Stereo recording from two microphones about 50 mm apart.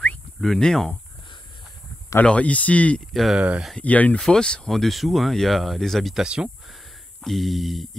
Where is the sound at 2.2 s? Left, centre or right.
Left.